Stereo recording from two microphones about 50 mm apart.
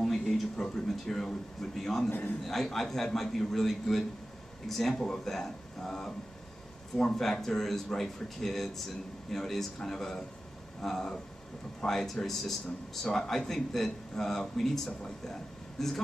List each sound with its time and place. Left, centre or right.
0.0 s speech: centre
2.0 s a man's voice: left
2.4 s speech: centre